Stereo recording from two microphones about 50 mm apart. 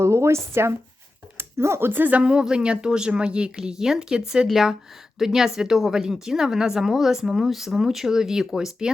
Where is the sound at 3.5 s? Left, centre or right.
Centre.